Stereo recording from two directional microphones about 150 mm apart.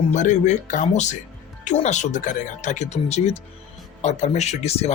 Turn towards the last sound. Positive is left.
turn(degrees=45)  # may be behind; listen again after turning